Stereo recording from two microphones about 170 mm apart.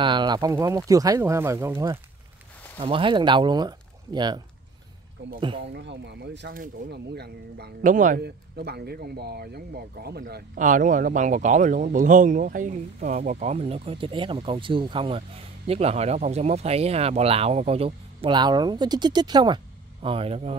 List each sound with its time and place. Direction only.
0.0 s speech: 25° right (ahead or behind)
2.8 s speech: 30° right (ahead or behind)
5.2 s speech: 90° right; by 7.7 s 75° right (ahead or behind)
7.8 s speech: 50° right (ahead or behind)
8.2 s speech: 70° right (ahead or behind); by 20.5 s 35° right (ahead or behind)